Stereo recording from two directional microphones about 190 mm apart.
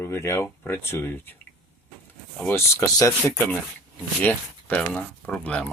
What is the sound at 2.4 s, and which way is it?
Speech, 15° left (ahead or behind).